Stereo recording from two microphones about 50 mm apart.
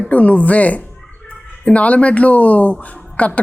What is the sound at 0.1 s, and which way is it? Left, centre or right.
Speech, left.